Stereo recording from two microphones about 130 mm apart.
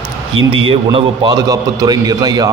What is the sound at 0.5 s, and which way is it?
Speech, 45° right (ahead or behind).